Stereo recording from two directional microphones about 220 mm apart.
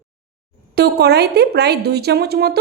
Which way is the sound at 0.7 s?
45° right (ahead or behind).